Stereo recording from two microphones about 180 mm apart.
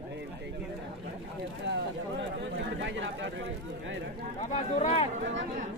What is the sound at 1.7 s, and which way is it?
Speech, 85° right.